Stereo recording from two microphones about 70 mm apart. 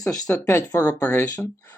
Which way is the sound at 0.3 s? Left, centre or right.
Left.